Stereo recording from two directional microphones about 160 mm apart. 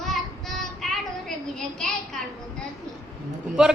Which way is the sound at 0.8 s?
Centre (ahead or behind).